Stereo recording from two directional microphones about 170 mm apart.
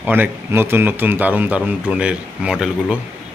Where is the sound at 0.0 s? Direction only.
10° right (ahead or behind).